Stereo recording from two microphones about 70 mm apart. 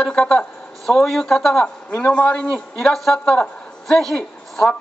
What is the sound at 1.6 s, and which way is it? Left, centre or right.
Speech, left.